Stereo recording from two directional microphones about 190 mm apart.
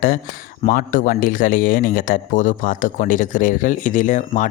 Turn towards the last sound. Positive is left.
turn(degrees=40)  # may be behind; listen again after turning